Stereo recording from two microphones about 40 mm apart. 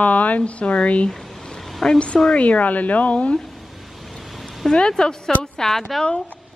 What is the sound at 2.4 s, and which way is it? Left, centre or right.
Speech, left.